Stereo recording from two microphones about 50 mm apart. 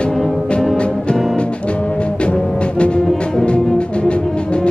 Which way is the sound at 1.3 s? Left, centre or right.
Left.